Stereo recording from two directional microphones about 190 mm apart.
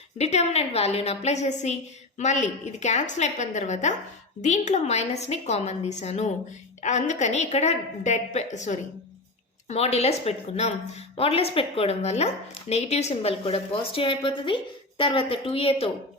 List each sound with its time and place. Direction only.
0.2 s speech: 35° left (ahead or behind)